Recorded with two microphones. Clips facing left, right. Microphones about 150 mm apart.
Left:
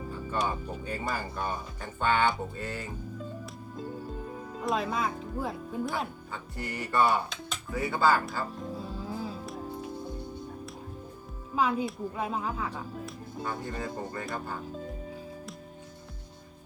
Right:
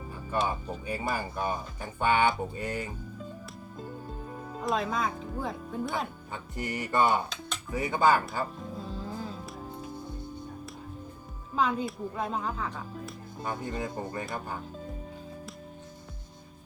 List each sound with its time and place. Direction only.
0.4 s speech: 10° right (ahead or behind)
4.5 s speech: centre (ahead or behind)
6.3 s speech: 20° right (ahead or behind)
8.5 s music: 5° left (ahead or behind)
11.5 s speech: 10° left (ahead or behind)
13.4 s speech: 15° right (ahead or behind)